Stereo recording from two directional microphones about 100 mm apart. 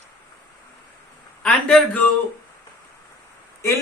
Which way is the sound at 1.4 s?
10° left (ahead or behind).